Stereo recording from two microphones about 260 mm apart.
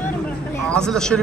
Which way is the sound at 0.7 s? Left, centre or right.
Centre.